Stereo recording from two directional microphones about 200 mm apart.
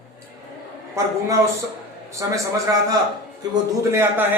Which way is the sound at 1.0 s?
15° right (ahead or behind).